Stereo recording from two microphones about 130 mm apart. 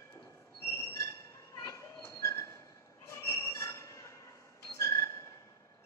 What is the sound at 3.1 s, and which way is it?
Train, 20° left (ahead or behind).